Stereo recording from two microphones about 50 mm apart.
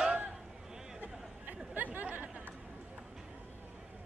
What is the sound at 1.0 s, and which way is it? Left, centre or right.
Chatter, right.